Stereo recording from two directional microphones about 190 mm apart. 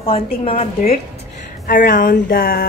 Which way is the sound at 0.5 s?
45° left (ahead or behind).